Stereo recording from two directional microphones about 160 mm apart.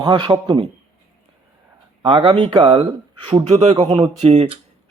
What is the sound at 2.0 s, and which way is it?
Speech, 30° right (ahead or behind).